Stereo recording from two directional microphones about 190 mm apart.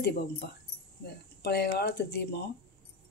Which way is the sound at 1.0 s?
60° left (ahead or behind).